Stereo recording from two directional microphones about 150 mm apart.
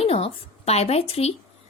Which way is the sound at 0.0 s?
40° left (ahead or behind).